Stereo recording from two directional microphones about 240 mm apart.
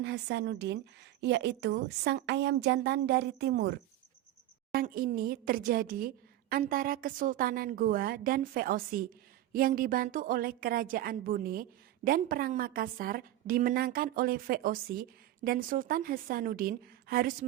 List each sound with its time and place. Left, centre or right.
0.0 s a woman's voice: right